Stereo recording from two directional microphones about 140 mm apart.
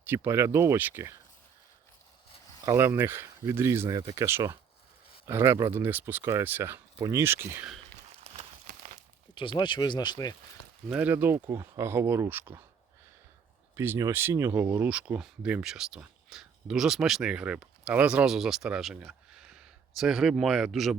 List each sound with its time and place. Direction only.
0.1 s speech: 15° right (ahead or behind)
2.6 s speech: 20° right (ahead or behind)
8.2 s a sound: 50° right (ahead or behind)
9.3 s speech: 35° left (ahead or behind)
10.8 s speech: 10° right (ahead or behind)
13.7 s speech: 15° right (ahead or behind); by 20.9 s centre (ahead or behind)